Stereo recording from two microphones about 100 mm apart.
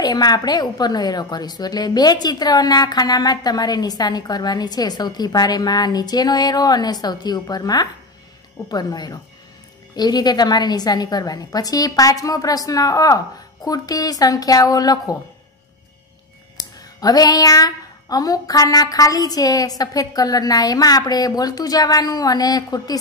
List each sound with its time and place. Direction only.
0.0 s a woman's voice: 40° left (ahead or behind)
16.5 s speech: 40° left (ahead or behind)